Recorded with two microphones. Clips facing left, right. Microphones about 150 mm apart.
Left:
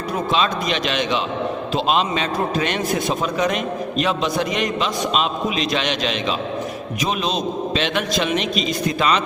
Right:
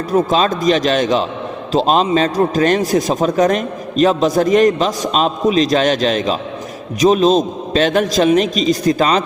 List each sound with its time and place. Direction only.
0.1 s a man's voice: 45° right (ahead or behind)